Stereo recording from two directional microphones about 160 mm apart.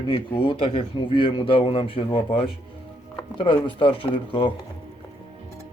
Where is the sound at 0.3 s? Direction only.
35° left (ahead or behind).